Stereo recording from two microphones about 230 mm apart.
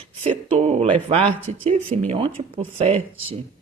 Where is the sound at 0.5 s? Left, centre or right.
Right.